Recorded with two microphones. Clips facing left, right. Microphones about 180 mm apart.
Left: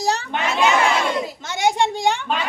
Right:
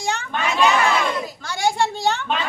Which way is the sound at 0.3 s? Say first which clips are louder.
Right 1 dB; 15° left (ahead or behind).